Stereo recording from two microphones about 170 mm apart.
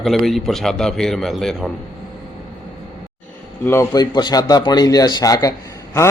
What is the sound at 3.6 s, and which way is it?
A man's voice, 15° left (ahead or behind).